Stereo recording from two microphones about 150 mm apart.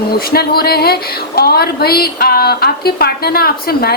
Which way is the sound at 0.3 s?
90° left.